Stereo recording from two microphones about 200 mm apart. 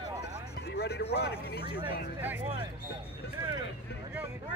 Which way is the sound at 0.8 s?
55° left (ahead or behind).